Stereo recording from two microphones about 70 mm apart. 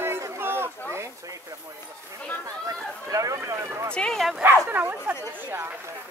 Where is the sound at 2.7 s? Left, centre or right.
Right.